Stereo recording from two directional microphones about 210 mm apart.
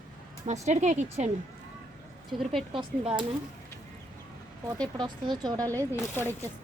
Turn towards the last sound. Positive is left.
turn(degrees=10)  # may be behind; listen again after turning